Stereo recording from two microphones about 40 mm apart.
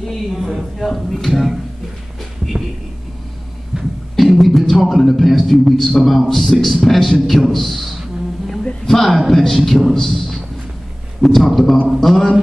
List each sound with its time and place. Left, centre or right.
0.0 s a woman's voice: centre
3.7 s music: centre
4.2 s a man's voice: centre
8.6 s a sound: centre
9.9 s a man's voice: centre